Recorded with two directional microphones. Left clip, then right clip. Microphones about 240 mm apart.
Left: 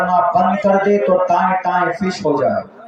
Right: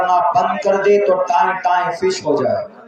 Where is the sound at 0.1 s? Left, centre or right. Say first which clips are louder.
Even; right.